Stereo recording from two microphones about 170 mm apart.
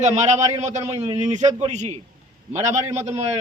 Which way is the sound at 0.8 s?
20° right (ahead or behind).